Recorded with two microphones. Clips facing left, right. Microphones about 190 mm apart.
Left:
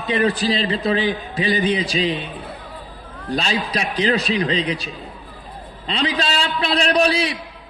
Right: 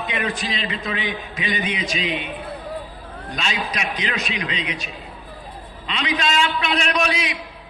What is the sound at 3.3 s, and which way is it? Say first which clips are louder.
A man's voice: left 5 dB; 35° left (ahead or behind).